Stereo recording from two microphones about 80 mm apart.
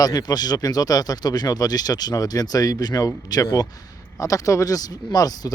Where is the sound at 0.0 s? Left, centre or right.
Left.